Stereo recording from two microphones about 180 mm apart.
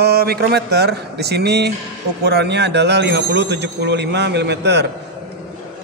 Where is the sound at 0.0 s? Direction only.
60° right (ahead or behind).